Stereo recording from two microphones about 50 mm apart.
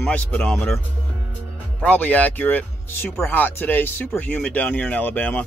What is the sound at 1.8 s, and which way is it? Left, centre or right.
Speech, left.